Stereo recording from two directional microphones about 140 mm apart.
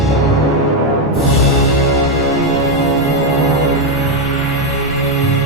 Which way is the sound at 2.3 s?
Centre (ahead or behind).